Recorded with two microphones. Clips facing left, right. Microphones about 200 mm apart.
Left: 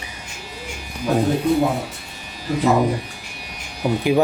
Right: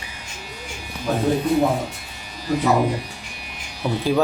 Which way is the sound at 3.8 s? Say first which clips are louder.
Left 3 dB; 15° left (ahead or behind).